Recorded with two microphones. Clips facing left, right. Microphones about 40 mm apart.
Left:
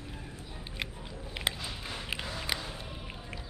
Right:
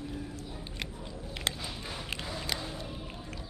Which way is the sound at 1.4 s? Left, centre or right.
Centre.